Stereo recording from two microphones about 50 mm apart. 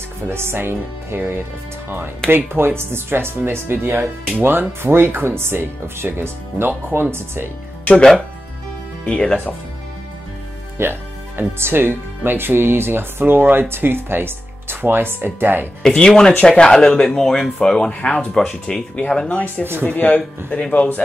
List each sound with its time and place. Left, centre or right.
0.3 s speech: right
9.0 s speech: left
10.8 s speech: right
15.8 s speech: left
19.2 s speech: left
19.6 s speech: right
19.9 s speech: left